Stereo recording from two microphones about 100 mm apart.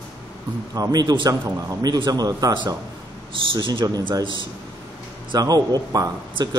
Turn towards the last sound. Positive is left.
turn(degrees=-40)  # may be behind; listen again after turning